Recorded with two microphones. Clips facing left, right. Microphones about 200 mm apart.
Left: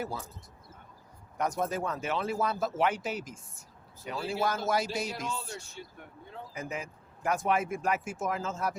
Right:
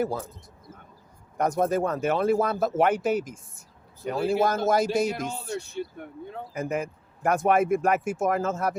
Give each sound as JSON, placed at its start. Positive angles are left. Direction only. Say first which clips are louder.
{"t": 0.0, "sound": "speech", "louder": "right 9 dB", "side_deg": -50}
{"t": 1.4, "sound": "speech", "louder": "right 7 dB", "side_deg": -50}